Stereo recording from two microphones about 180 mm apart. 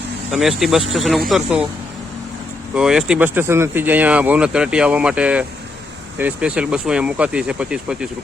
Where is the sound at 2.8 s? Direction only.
5° right (ahead or behind).